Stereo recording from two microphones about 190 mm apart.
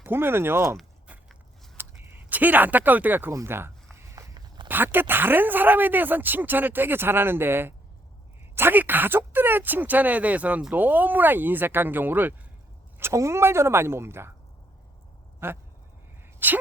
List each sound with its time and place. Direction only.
0.0 s speech: 10° right (ahead or behind)
0.8 s a sound: 5° right (ahead or behind)
3.9 s walk: 15° right (ahead or behind)
4.7 s speech: 10° right (ahead or behind)
15.4 s speech: 10° right (ahead or behind)